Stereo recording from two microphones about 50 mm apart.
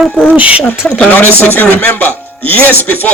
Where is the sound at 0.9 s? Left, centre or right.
Left.